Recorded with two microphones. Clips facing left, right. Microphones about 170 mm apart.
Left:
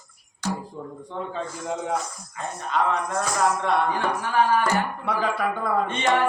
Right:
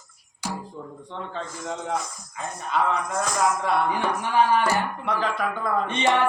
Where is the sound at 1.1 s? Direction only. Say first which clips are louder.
Left 3 dB; 5° left (ahead or behind).